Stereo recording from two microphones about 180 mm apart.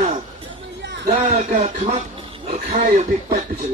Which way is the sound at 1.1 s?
40° right (ahead or behind).